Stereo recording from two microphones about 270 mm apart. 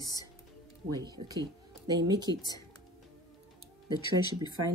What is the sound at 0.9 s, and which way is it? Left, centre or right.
Speech, centre.